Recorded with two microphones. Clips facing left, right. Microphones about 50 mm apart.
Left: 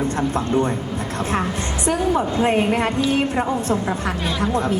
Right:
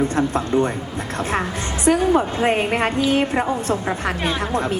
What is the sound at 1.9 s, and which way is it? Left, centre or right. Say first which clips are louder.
A woman's voice: right 3 dB; right.